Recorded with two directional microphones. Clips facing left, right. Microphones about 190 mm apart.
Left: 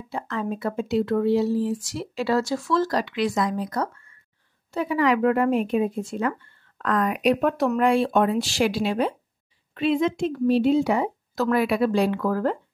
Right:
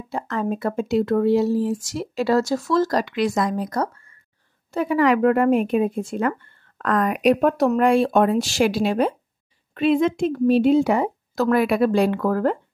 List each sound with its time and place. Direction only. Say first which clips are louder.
0.1 s speech: right 4 dB; 45° right (ahead or behind)